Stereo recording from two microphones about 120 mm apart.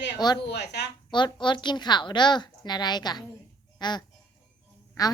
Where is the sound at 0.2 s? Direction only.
35° left (ahead or behind).